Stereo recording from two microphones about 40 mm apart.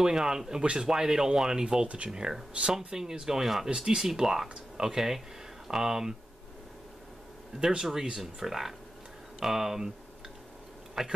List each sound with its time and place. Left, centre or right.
0.0 s speech: centre
7.6 s speech: centre
11.0 s speech: centre